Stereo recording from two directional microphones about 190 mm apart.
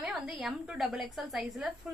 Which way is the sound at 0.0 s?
5° right (ahead or behind).